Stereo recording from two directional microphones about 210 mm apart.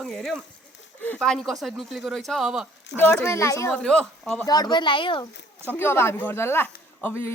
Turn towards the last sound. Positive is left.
turn(degrees=10)  # may be behind; listen again after turning